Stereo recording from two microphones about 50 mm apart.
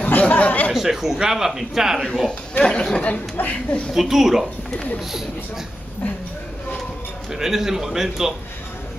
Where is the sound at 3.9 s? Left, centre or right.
Centre.